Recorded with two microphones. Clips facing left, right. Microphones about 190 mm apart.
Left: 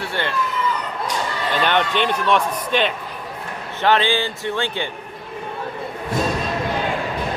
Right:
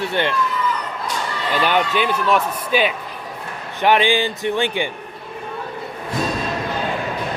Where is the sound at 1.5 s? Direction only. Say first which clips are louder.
Right 1 dB; 5° right (ahead or behind).